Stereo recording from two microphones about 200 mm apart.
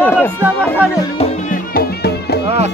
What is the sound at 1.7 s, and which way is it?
Music, 55° left (ahead or behind).